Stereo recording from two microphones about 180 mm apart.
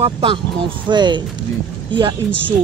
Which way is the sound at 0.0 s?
30° right (ahead or behind).